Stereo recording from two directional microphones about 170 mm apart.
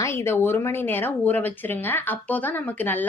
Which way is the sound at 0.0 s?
15° left (ahead or behind).